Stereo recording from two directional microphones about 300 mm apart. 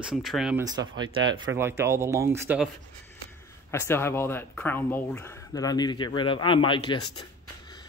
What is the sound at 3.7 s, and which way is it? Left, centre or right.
Speech, centre.